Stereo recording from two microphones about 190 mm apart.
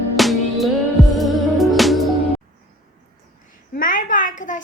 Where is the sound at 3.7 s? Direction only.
45° left (ahead or behind).